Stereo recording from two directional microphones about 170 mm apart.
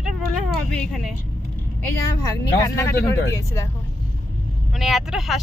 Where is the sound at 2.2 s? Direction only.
20° left (ahead or behind).